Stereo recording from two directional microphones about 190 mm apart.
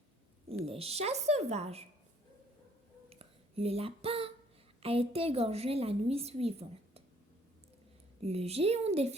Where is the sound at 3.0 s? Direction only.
30° right (ahead or behind).